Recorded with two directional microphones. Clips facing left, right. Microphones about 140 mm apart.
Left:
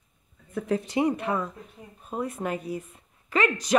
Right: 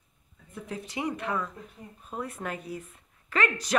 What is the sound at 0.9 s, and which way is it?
A woman's voice, 25° left (ahead or behind).